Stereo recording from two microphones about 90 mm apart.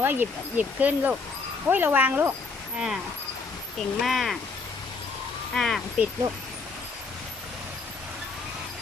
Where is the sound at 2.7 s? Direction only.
5° right (ahead or behind).